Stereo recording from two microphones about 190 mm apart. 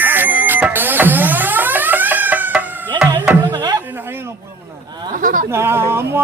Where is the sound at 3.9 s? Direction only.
10° right (ahead or behind).